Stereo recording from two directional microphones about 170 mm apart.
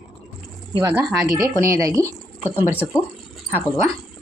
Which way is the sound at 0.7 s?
15° right (ahead or behind).